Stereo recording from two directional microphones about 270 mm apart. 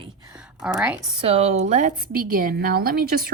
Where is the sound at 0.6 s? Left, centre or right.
Centre.